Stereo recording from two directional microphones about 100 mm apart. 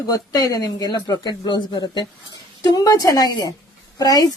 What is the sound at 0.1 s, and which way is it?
A woman's voice, 35° left (ahead or behind).